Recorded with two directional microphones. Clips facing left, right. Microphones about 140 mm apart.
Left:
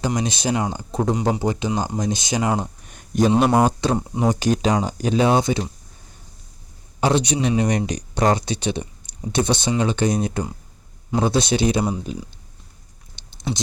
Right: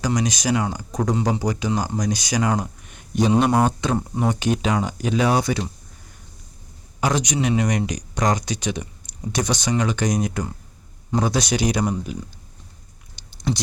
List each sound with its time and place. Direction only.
0.0 s speech: 25° left (ahead or behind)
2.8 s a sound: 45° left (ahead or behind)
3.7 s speech: 35° left (ahead or behind)
3.9 s speech: 15° left (ahead or behind)
4.3 s speech: 40° left (ahead or behind)
7.0 s speech: 30° left (ahead or behind)
13.1 s a sound: 20° left (ahead or behind)